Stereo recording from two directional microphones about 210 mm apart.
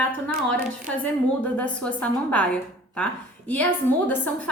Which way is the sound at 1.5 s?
5° left (ahead or behind).